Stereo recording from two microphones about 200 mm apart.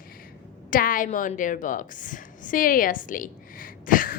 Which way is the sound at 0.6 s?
45° left (ahead or behind).